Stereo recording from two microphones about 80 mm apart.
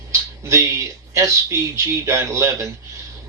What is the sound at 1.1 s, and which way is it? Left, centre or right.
Speech, right.